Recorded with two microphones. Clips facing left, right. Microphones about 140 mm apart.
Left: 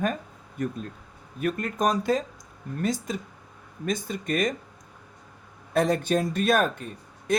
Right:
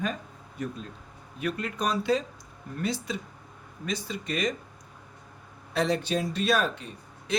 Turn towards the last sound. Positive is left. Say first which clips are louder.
# left 4 dB
turn(degrees=50)  # may be behind; listen again after turning